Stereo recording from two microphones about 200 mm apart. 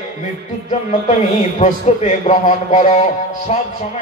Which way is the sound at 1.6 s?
35° left (ahead or behind).